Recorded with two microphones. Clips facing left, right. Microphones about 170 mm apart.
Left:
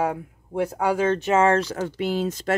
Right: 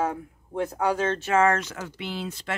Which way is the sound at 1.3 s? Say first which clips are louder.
Left 2 dB; 30° left (ahead or behind).